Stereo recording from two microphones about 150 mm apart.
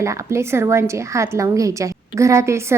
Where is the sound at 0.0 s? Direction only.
20° right (ahead or behind).